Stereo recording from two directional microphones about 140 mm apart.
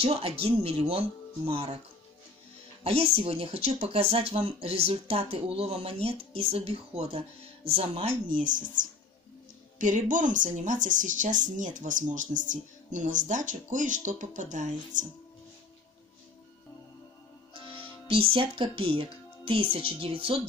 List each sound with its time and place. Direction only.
0.0 s speech: 45° right (ahead or behind)
2.8 s speech: 45° right (ahead or behind)
8.3 s speech: 70° right (ahead or behind)
9.8 s a woman's voice: 65° right (ahead or behind)
18.0 s speech: 40° right (ahead or behind)